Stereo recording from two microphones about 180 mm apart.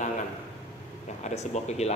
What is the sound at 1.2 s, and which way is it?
Speech, 40° left (ahead or behind).